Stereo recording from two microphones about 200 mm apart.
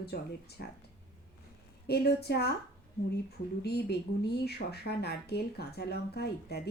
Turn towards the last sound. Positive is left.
turn(degrees=55)  # may be behind; listen again after turning